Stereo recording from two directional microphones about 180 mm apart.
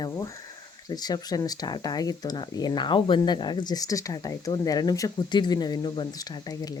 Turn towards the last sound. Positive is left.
turn(degrees=20)  # may be behind; listen again after turning